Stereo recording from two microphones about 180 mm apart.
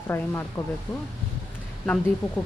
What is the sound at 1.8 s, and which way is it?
Speech, 5° left (ahead or behind).